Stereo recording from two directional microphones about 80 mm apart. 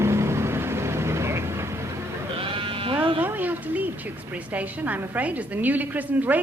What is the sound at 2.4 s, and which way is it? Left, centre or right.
Sheep, right.